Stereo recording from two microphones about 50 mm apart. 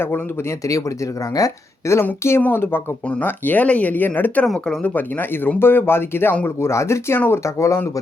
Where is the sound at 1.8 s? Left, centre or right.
Left.